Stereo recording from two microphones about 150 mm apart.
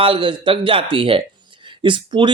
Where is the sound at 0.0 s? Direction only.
35° right (ahead or behind).